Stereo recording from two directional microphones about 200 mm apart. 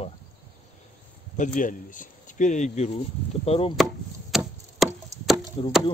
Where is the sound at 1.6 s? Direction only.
40° left (ahead or behind).